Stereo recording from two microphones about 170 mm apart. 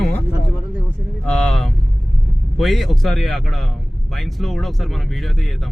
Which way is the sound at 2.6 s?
Centre (ahead or behind).